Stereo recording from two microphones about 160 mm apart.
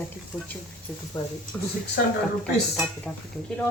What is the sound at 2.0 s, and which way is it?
Speech, 70° left (ahead or behind).